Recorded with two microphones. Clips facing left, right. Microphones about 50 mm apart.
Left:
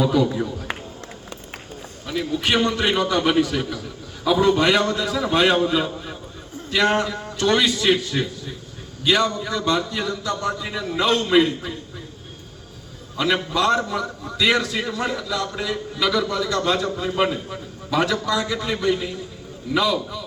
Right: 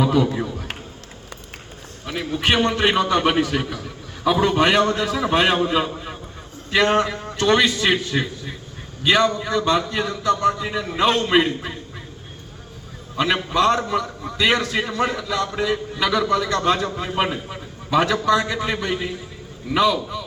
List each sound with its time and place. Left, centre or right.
0.0 s a man's voice: right
2.0 s a man's voice: right
13.3 s a man's voice: right
18.5 s a man's voice: right